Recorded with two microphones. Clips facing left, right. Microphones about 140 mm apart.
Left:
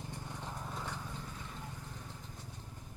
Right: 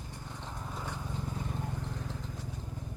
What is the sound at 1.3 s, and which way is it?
Vehicle, 45° right (ahead or behind).